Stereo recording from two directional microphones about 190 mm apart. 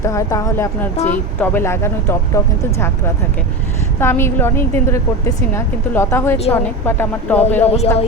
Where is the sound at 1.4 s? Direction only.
10° left (ahead or behind).